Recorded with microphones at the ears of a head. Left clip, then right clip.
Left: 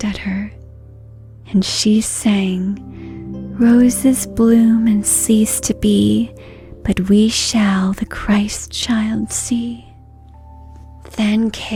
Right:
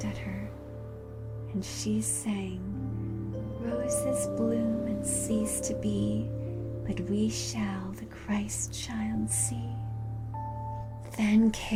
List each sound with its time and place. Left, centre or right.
0.0 s speech: left
11.1 s speech: left